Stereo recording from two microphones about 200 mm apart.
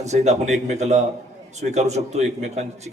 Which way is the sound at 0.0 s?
35° right (ahead or behind).